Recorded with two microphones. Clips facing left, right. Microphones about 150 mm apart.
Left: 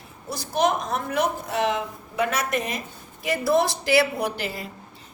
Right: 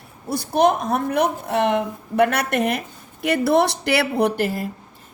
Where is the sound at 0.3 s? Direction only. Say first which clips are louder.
Right 5 dB; 55° right (ahead or behind).